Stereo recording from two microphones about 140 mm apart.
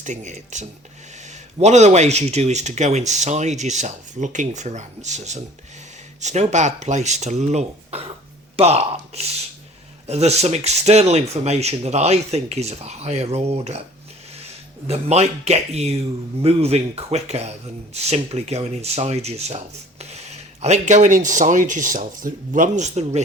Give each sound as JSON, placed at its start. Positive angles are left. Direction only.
{"t": 0.0, "sound": "speech", "side_deg": -60}
{"t": 14.8, "sound": "speech", "side_deg": -50}